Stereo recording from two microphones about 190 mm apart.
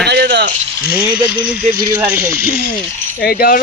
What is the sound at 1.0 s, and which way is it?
Dog, 5° right (ahead or behind).